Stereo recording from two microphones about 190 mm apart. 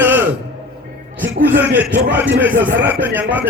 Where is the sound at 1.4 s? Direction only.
10° right (ahead or behind).